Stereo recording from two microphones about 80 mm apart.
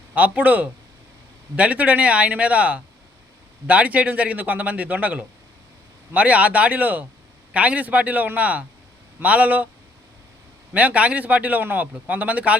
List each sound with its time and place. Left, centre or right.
0.1 s speech: centre
10.8 s speech: centre